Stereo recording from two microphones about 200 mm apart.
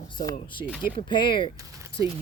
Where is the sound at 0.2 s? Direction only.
25° left (ahead or behind).